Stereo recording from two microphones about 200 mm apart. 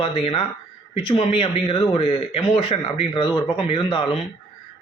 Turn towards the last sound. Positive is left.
turn(degrees=25)  # may be behind; listen again after turning